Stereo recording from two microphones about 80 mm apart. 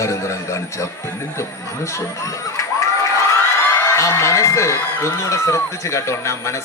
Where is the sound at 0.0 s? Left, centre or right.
Left.